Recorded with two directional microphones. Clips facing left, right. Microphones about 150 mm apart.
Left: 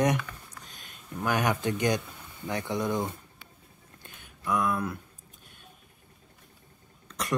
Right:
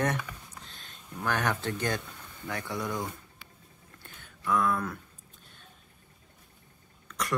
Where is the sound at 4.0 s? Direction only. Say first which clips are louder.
Left 1 dB; 15° left (ahead or behind).